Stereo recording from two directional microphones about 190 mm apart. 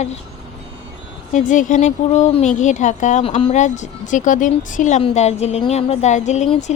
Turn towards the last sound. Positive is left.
turn(degrees=35)  # may be behind; listen again after turning